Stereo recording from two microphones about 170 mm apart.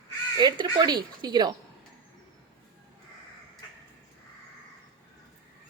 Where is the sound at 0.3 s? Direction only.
25° right (ahead or behind).